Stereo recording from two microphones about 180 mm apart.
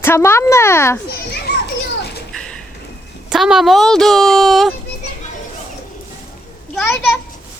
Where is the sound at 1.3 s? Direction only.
70° left (ahead or behind).